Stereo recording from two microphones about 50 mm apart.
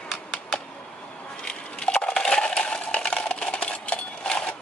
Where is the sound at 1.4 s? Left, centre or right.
Centre.